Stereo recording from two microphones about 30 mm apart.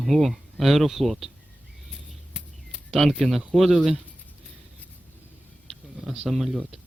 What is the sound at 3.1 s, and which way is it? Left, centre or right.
Speech, centre.